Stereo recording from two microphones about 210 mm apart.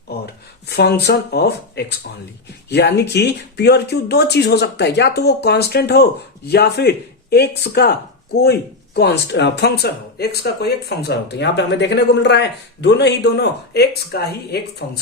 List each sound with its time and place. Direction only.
0.7 s speech: 50° left (ahead or behind)